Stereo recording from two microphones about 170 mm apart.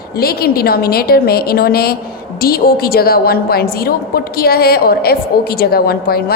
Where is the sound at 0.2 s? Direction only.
65° left (ahead or behind).